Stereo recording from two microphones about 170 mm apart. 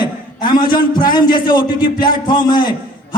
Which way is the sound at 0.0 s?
25° left (ahead or behind).